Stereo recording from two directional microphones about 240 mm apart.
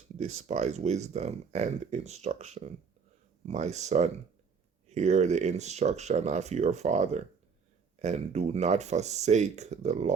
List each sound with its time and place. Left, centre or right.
0.2 s speech: right